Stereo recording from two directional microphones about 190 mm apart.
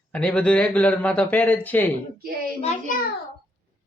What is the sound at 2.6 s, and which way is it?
Speech, 45° left (ahead or behind).